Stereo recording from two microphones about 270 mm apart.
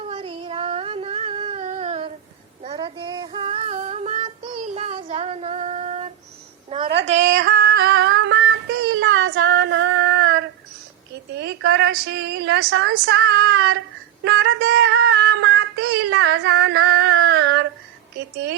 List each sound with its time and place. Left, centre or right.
0.1 s a sound: right
2.6 s child singing: centre
6.7 s a sound: right
7.1 s female singing: right
11.1 s a woman's voice: right
14.3 s child singing: right